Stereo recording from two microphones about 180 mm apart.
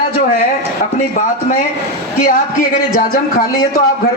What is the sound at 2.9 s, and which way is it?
Speech, 50° left (ahead or behind).